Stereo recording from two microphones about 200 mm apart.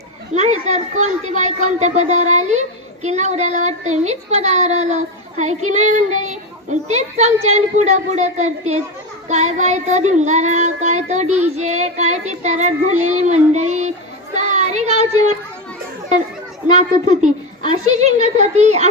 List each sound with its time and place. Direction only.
0.7 s speech: 35° right (ahead or behind)
14.3 s child singing: 35° right (ahead or behind)
16.7 s speech: 35° right (ahead or behind)